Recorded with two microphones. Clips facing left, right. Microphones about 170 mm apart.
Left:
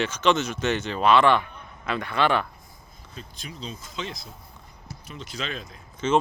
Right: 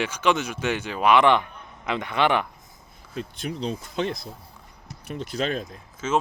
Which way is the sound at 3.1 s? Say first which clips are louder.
Right 10 dB; 65° right (ahead or behind).